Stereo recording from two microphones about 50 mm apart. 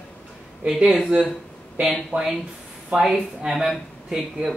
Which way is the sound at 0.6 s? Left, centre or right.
Right.